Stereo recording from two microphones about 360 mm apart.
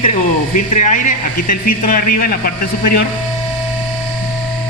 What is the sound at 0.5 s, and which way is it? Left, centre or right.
A man's voice, left.